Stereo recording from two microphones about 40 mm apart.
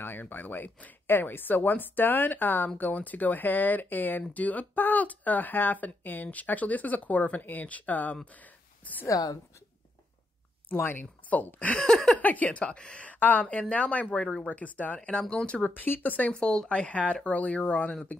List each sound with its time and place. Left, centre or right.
0.0 s speech: left
2.8 s speech: left
4.3 s speech: left
10.7 s speech: left
11.2 s speech: left
11.8 s a sound: centre
12.2 s speech: left
14.2 s speech: centre
14.5 s speech: left
15.0 s a woman's voice: left
15.6 s speech: left
16.3 s a woman's voice: left